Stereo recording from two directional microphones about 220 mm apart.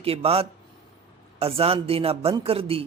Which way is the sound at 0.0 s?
25° right (ahead or behind).